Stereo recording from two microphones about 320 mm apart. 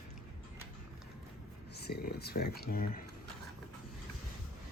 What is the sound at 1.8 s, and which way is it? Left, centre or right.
Speech, left.